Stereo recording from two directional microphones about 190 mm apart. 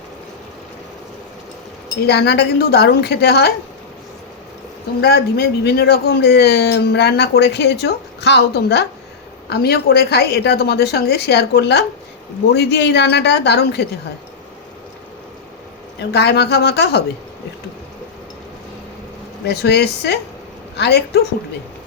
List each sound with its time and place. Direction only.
2.0 s speech: 60° left (ahead or behind)
4.9 s speech: 55° left (ahead or behind)
16.0 s speech: 60° left (ahead or behind)
19.5 s speech: 60° left (ahead or behind)